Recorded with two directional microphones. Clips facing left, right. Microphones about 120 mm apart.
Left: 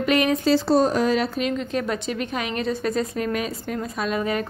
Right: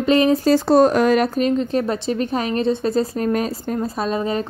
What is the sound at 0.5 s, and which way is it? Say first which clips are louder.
Speech: right 5 dB; 55° right (ahead or behind).